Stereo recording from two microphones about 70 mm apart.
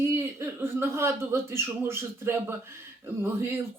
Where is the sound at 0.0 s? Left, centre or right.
Right.